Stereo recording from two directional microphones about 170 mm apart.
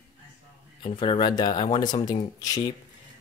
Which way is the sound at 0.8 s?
30° left (ahead or behind).